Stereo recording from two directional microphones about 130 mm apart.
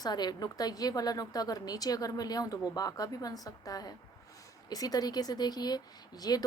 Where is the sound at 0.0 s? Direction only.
30° left (ahead or behind).